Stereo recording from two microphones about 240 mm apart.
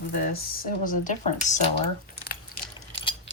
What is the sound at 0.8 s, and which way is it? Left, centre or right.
Speech, left.